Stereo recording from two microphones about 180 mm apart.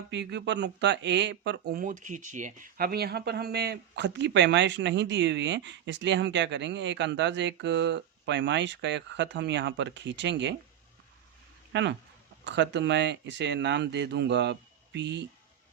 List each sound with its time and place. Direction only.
0.1 s speech: 75° right (ahead or behind)
11.7 s speech: 80° right